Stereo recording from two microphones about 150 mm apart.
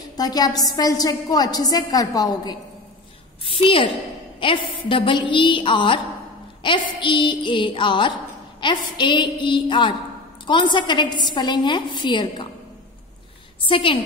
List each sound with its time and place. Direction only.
0.2 s a woman's voice: 25° left (ahead or behind)
3.4 s a woman's voice: 35° left (ahead or behind)
13.7 s a woman's voice: 35° left (ahead or behind)